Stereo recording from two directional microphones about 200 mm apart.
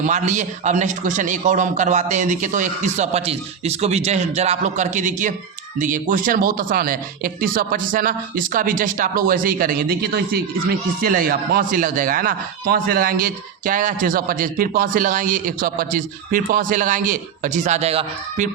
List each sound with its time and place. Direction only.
0.0 s a man's voice: 35° right (ahead or behind)